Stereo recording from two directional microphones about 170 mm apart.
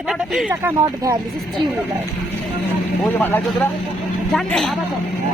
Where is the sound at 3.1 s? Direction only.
10° left (ahead or behind).